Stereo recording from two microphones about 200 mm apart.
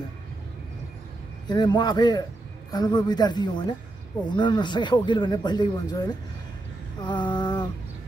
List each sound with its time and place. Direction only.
1.5 s speech: 20° left (ahead or behind)
7.0 s lullaby: 20° left (ahead or behind)